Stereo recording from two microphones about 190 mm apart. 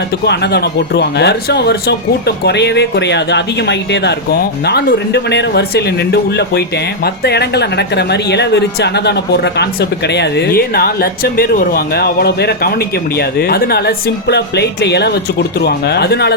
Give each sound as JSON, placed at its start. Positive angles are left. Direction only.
{"t": 0.3, "sound": "speech", "side_deg": 60}